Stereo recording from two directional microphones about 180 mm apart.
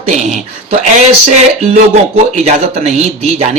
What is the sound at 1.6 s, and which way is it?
A man's voice, 40° right (ahead or behind).